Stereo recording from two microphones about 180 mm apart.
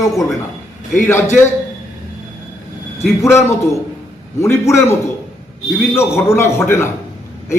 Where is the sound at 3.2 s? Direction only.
15° left (ahead or behind).